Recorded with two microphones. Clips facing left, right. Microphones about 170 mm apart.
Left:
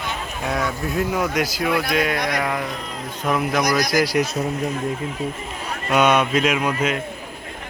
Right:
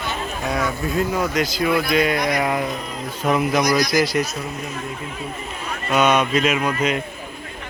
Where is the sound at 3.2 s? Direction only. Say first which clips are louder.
Right 2 dB; 5° right (ahead or behind).